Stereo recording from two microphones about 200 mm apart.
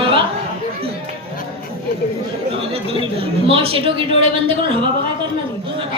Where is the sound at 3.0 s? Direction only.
25° right (ahead or behind).